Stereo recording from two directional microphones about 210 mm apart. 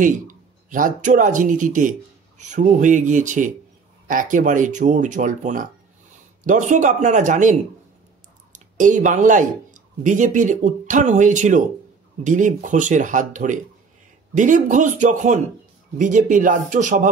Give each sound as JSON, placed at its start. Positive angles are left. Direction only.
{"t": 0.0, "sound": "speech", "side_deg": -40}
{"t": 8.5, "sound": "speech", "side_deg": -35}